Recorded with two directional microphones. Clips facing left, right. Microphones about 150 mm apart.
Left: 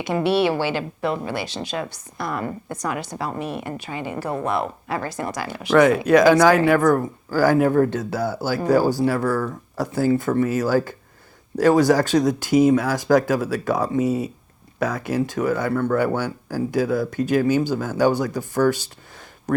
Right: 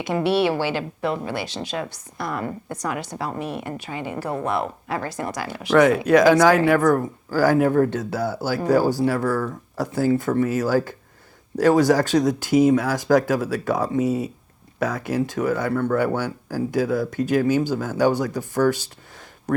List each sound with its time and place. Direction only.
0.1 s a woman's voice: 20° left (ahead or behind)